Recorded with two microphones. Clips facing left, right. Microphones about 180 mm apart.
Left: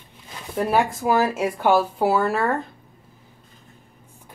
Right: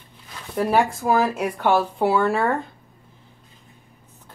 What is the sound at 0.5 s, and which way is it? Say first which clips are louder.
Speech: right 1 dB; 5° left (ahead or behind).